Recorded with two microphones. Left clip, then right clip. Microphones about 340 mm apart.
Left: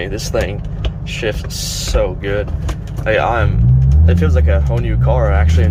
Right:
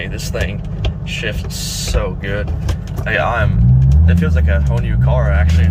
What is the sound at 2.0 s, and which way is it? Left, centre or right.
Speech, centre.